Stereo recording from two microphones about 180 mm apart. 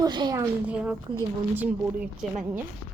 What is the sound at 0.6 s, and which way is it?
A woman's voice, 5° right (ahead or behind).